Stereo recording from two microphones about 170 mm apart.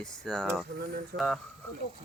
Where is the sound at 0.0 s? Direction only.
5° left (ahead or behind).